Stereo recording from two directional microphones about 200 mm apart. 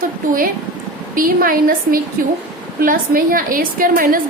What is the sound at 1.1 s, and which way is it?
A woman's voice, 45° right (ahead or behind).